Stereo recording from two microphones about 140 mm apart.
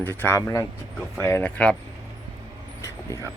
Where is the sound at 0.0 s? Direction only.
15° left (ahead or behind).